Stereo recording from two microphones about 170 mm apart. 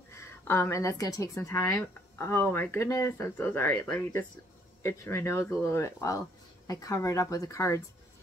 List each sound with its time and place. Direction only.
0.1 s a woman's voice: 15° left (ahead or behind)